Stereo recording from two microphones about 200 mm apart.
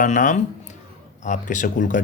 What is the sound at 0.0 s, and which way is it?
Speech, 40° left (ahead or behind).